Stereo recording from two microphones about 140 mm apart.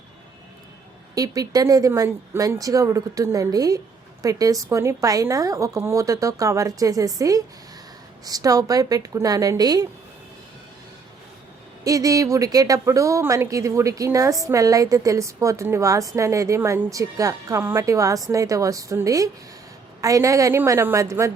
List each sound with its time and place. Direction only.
1.1 s a woman's voice: 25° right (ahead or behind)
11.8 s a woman's voice: 25° right (ahead or behind)